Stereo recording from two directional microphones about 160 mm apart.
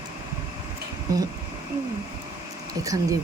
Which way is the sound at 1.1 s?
20° right (ahead or behind).